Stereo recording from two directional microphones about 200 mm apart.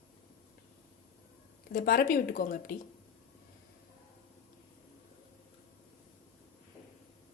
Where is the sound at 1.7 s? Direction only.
50° left (ahead or behind).